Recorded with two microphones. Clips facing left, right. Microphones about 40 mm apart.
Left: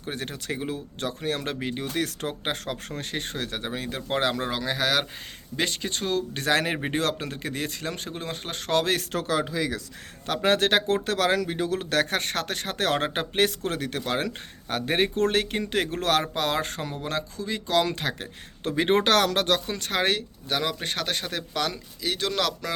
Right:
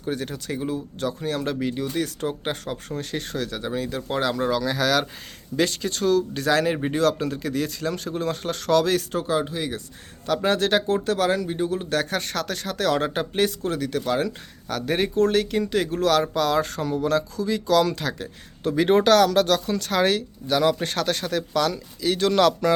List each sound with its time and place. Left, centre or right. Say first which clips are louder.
0.0 s speech: right 5 dB; left
6.3 s speech: right 3 dB; left
9.1 s speech: right 2 dB; left
10.2 s speech: right 1 dB; left
14.8 s speech: right 2 dB; left
20.1 s speech: right 5 dB; centre
22.0 s speech: right 8 dB; centre